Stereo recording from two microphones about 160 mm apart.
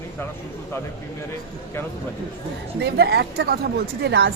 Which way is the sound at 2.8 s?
85° right.